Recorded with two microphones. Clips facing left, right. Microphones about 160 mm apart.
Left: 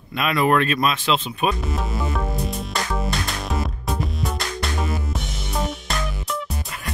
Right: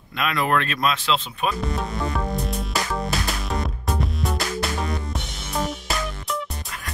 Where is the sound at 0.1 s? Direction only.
15° left (ahead or behind).